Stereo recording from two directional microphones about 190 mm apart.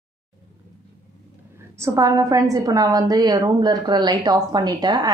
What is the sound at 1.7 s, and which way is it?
A woman's voice, 15° right (ahead or behind).